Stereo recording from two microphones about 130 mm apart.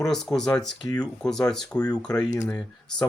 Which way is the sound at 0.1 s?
5° left (ahead or behind).